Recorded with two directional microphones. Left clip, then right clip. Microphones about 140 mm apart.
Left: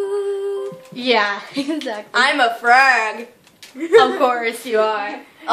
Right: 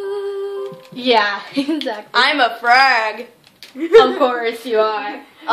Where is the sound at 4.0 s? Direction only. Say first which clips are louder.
Right 2 dB; 10° right (ahead or behind).